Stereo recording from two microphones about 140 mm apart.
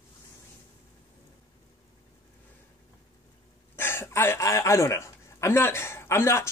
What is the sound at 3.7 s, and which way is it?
A woman's voice, 15° left (ahead or behind).